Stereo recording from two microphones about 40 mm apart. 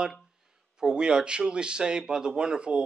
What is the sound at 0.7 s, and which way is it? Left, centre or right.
Speech, centre.